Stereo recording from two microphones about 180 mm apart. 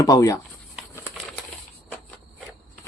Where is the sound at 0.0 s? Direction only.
20° left (ahead or behind).